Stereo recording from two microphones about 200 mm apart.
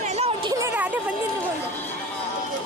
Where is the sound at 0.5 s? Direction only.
10° right (ahead or behind).